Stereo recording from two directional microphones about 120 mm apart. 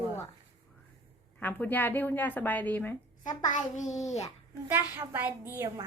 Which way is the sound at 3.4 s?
90° left.